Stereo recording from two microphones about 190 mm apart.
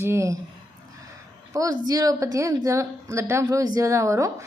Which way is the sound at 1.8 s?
20° right (ahead or behind).